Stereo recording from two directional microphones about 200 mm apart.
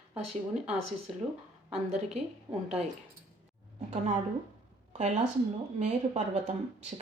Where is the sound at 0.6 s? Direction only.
5° right (ahead or behind).